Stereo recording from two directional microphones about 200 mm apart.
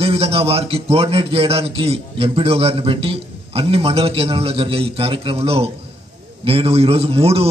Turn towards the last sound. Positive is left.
turn(degrees=-30)  # may be behind; listen again after turning